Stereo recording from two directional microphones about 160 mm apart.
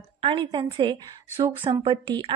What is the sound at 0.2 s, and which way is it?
A woman's voice, 30° right (ahead or behind).